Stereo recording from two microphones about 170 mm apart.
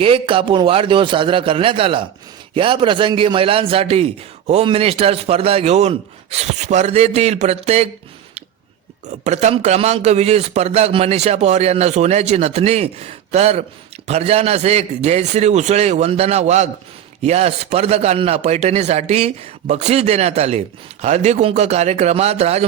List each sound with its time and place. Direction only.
0.0 s a man's voice: 30° right (ahead or behind)
9.0 s a man's voice: 45° right (ahead or behind)